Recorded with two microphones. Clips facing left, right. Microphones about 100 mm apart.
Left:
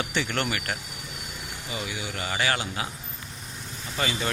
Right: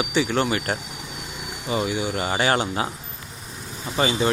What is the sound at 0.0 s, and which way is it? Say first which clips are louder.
Speech: right 6 dB; 10° right (ahead or behind).